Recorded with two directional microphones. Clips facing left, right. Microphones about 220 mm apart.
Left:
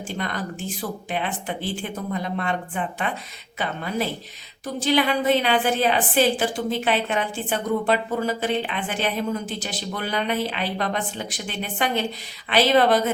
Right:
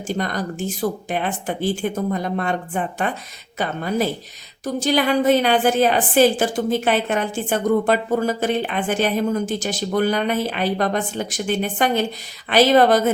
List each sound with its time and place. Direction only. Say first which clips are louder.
0.1 s a woman's voice: right 6 dB; 40° right (ahead or behind)